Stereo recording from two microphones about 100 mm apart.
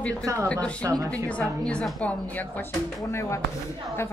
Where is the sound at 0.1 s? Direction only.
30° right (ahead or behind).